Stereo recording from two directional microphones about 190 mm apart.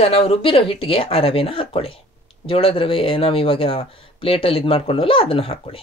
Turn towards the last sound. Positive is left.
turn(degrees=30)  # may be behind; listen again after turning